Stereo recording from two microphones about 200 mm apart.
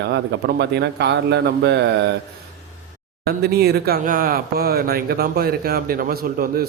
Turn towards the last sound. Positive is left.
turn(degrees=-50)  # may be behind; listen again after turning